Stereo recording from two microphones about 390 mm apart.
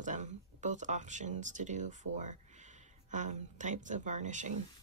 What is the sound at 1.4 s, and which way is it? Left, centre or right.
Speech, centre.